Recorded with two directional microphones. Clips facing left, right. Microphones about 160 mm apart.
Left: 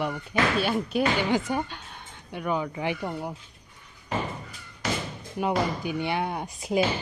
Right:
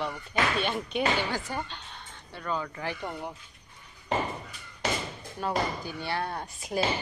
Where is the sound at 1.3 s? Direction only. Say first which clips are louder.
Left 8 dB; 20° left (ahead or behind).